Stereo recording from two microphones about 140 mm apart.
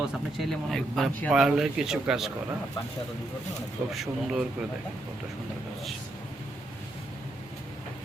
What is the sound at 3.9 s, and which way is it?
Speech, 5° right (ahead or behind).